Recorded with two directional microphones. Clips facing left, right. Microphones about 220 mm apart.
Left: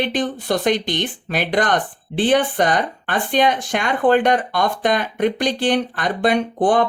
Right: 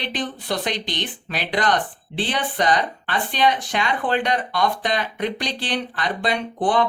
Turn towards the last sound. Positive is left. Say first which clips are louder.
# left 5 dB
turn(degrees=50)  # may be behind; listen again after turning